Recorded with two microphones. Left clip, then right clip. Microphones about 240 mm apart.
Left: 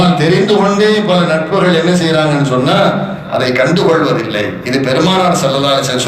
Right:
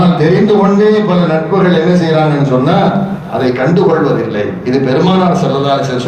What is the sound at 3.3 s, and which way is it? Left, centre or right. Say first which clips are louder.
A man's voice: even; left.